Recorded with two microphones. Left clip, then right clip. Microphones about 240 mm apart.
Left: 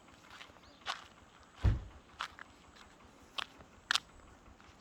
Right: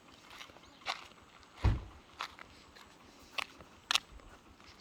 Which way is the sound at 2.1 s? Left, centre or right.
Right.